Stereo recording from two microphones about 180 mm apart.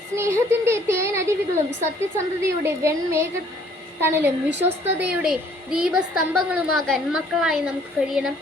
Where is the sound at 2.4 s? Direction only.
15° right (ahead or behind).